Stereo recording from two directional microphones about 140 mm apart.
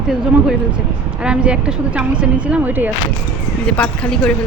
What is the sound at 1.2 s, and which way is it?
Speech, 5° right (ahead or behind).